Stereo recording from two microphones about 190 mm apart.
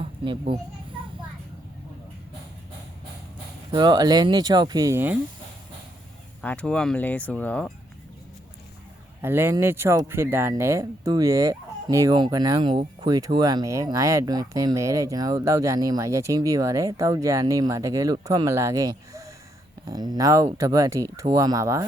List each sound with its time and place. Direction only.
0.0 s a child's voice: 30° right (ahead or behind)
3.7 s speech: 25° right (ahead or behind)
6.4 s speech: 5° left (ahead or behind)
9.2 s speech: 10° right (ahead or behind)